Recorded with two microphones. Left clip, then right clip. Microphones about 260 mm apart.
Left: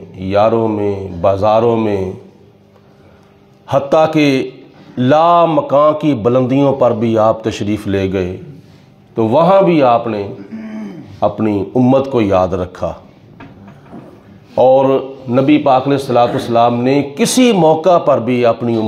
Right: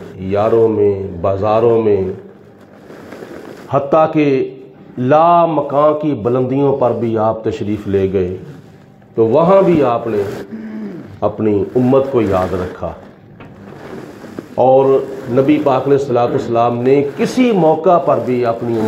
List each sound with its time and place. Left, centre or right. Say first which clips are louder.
0.2 s a man's voice: even; left
3.6 s a man's voice: left 1 dB; left
11.1 s a man's voice: even; left
14.6 s a man's voice: left 1 dB; left